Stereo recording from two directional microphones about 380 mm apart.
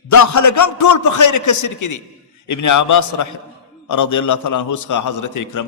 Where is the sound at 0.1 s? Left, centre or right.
Left.